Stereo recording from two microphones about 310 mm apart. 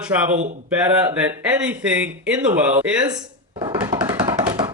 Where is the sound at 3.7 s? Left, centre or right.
Centre.